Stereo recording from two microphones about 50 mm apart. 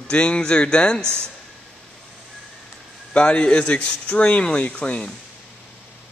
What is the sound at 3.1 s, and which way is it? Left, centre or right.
Speech, left.